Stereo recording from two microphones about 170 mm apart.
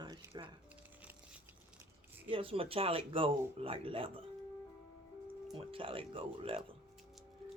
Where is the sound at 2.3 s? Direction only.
30° right (ahead or behind).